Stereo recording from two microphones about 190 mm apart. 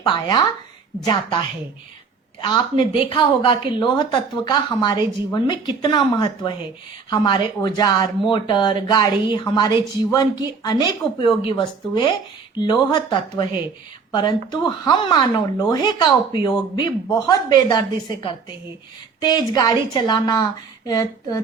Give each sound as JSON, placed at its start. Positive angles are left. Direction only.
{"t": 0.0, "sound": "speech", "side_deg": 20}
{"t": 2.4, "sound": "speech", "side_deg": 25}